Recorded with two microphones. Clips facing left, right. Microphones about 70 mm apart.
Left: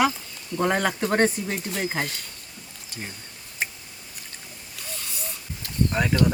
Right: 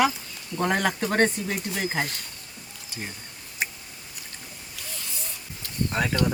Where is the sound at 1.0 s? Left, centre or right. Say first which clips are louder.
Left 1 dB; centre.